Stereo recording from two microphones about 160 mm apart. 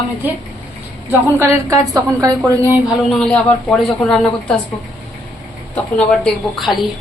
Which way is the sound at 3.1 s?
5° left (ahead or behind).